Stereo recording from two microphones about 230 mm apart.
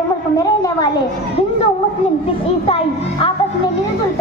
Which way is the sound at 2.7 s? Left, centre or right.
Left.